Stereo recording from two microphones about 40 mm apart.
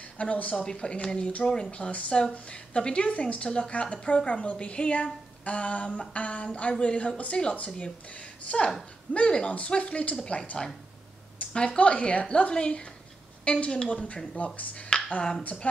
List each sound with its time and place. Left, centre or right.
0.2 s speech: left
0.7 s speech: left
1.5 s speech: centre
1.8 s speech: left
3.4 s speech: centre
14.0 s speech: left